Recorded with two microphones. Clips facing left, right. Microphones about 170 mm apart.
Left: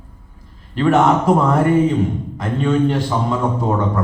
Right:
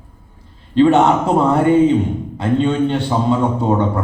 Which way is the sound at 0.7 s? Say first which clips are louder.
Right 3 dB; 25° right (ahead or behind).